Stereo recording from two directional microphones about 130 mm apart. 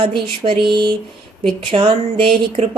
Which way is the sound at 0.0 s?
40° right (ahead or behind).